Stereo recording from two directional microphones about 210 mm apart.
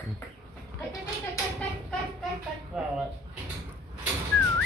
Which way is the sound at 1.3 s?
5° left (ahead or behind).